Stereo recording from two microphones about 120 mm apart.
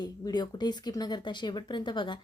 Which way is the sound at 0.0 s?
35° left (ahead or behind).